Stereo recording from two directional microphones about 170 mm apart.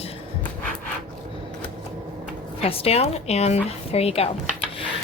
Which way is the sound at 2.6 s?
35° left (ahead or behind).